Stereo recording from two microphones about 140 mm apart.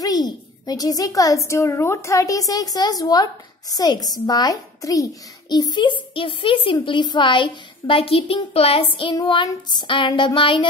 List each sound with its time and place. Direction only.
0.0 s a sound: 25° left (ahead or behind)
1.5 s a woman's voice: 20° left (ahead or behind); by 8.8 s 45° left (ahead or behind)
9.1 s a woman's voice: 30° left (ahead or behind)